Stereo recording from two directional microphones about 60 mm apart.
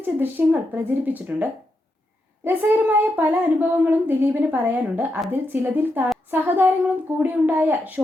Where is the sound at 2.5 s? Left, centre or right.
Right.